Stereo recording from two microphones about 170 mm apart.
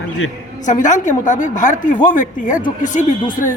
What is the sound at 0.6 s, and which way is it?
A woman's voice, 45° left (ahead or behind).